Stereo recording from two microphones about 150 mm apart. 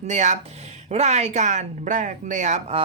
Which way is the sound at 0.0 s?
55° right (ahead or behind).